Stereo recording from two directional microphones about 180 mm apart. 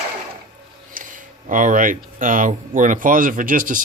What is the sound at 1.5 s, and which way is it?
Speech, 45° right (ahead or behind).